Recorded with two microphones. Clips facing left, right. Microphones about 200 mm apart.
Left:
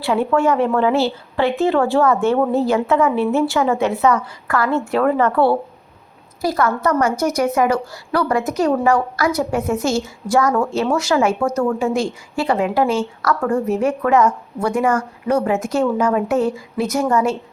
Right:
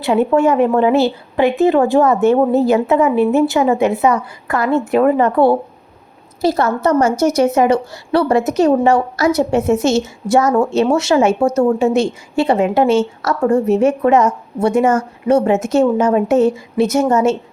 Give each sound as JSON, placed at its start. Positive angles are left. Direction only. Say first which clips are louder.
{"t": 0.0, "sound": "a woman's voice", "louder": "right 4 dB", "side_deg": -20}